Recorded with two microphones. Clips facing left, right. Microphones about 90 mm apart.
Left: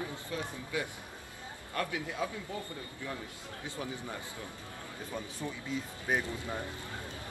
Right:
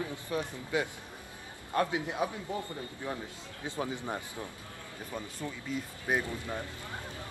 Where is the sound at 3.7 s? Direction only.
20° right (ahead or behind).